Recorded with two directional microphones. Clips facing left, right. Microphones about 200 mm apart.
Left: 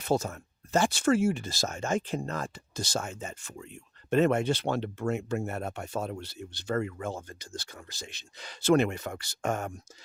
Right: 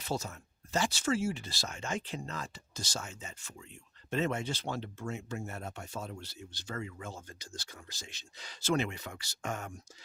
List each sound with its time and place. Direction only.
0.0 s speech: 50° left (ahead or behind)